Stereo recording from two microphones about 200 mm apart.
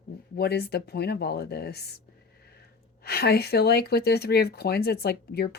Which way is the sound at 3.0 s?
50° left (ahead or behind).